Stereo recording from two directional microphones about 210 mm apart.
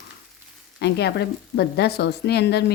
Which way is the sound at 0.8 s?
50° left (ahead or behind).